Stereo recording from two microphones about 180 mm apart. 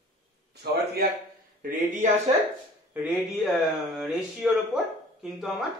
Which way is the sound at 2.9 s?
10° right (ahead or behind).